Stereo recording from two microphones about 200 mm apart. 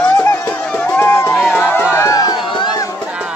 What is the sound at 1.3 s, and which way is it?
Run, 5° left (ahead or behind).